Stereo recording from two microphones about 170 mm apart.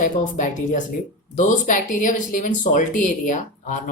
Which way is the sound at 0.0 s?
50° left (ahead or behind).